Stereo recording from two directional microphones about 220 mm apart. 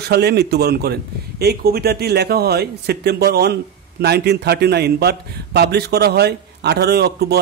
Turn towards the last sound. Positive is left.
turn(degrees=-45)  # may be behind; listen again after turning